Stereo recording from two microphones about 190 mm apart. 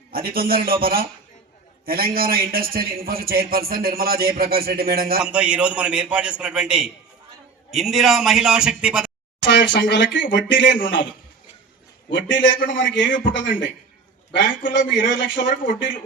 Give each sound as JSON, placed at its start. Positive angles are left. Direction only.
{"t": 0.1, "sound": "a man's voice", "side_deg": -50}
{"t": 5.2, "sound": "a man's voice", "side_deg": -5}
{"t": 9.4, "sound": "speech", "side_deg": 70}
{"t": 12.1, "sound": "speech", "side_deg": 75}
{"t": 15.4, "sound": "speech", "side_deg": 45}